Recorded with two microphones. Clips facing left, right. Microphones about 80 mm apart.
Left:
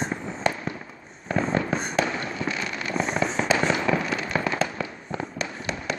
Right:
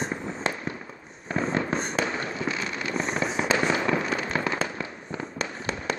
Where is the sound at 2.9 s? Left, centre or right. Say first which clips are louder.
Left 3 dB; centre.